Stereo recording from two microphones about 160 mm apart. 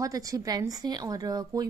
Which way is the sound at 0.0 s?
20° right (ahead or behind).